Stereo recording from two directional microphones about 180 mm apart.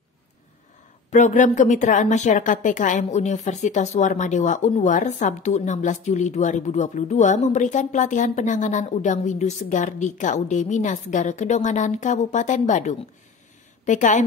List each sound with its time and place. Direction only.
1.1 s a woman's voice: 45° left (ahead or behind)